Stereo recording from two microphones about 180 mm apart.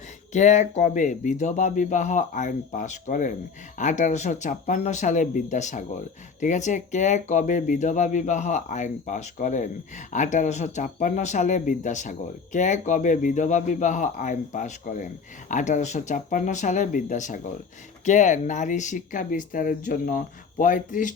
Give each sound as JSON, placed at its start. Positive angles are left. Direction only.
{"t": 0.3, "sound": "speech", "side_deg": 40}